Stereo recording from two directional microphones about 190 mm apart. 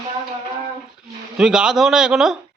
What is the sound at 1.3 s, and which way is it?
A man's voice, 5° right (ahead or behind).